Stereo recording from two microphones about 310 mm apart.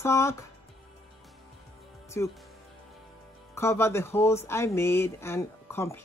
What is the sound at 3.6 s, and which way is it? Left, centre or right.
Speech, centre.